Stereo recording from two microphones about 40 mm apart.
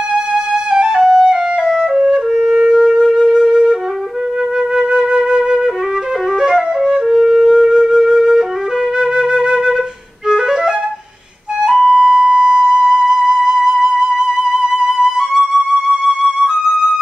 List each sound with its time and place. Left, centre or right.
0.1 s flute: centre
2.5 s wind instrument: right
4.7 s flute: centre
14.1 s music: centre
16.4 s flute: centre